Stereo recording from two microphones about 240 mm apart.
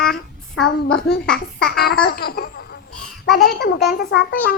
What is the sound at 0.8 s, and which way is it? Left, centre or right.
A child's voice, left.